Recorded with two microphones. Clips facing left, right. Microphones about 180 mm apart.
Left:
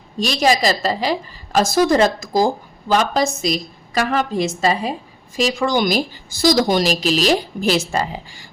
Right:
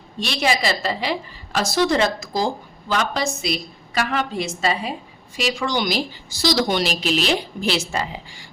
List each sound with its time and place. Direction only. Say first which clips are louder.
0.2 s a woman's voice: left 5 dB; 40° left (ahead or behind)